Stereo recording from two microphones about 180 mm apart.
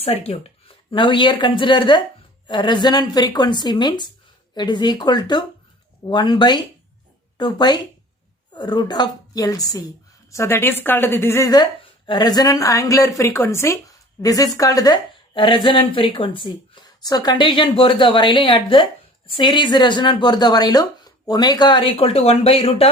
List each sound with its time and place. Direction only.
0.0 s a woman's voice: 35° left (ahead or behind)